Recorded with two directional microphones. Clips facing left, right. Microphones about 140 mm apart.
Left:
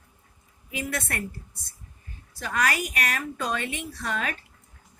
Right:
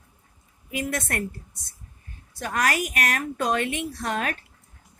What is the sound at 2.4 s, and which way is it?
Speech, 50° right (ahead or behind).